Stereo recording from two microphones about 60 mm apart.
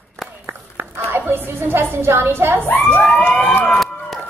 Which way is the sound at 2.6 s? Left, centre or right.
Left.